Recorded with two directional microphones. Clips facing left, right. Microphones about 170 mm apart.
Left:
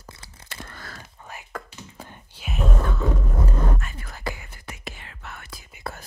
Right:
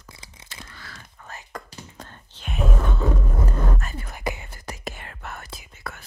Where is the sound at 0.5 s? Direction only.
50° left (ahead or behind).